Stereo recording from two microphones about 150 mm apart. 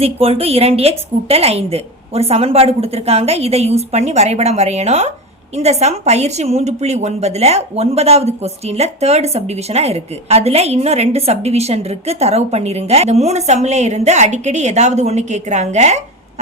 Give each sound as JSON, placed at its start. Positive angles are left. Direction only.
{"t": 0.0, "sound": "a woman's voice", "side_deg": -40}